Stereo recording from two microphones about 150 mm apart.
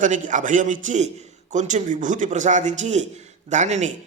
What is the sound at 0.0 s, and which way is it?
A man's voice, 60° right (ahead or behind).